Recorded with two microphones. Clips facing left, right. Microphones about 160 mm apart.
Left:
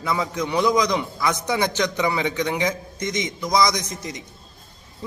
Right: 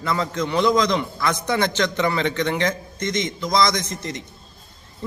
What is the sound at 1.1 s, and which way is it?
Speech, 5° left (ahead or behind).